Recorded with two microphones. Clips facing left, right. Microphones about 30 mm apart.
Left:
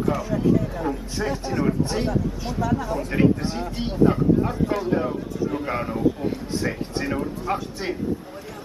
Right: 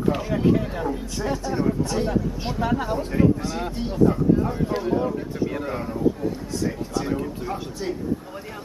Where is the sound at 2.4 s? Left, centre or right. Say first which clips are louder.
Even; right.